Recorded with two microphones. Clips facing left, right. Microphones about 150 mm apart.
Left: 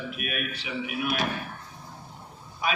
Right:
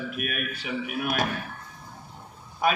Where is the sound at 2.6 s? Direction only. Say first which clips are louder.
Right 5 dB; 50° right (ahead or behind).